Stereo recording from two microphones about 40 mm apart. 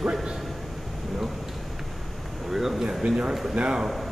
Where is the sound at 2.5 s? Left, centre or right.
Centre.